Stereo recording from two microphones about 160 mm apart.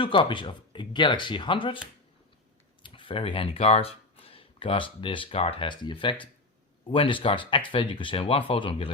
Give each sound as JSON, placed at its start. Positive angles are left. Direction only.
{"t": 0.0, "sound": "speech", "side_deg": 35}
{"t": 2.8, "sound": "speech", "side_deg": 30}